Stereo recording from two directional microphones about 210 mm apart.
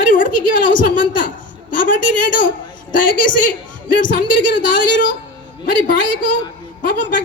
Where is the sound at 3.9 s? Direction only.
40° left (ahead or behind).